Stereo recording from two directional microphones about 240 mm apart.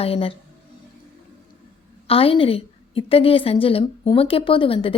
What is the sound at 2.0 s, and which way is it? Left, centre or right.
A woman's voice, left.